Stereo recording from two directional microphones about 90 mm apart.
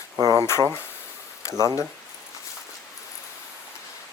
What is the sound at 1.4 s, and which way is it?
Speech, 35° left (ahead or behind).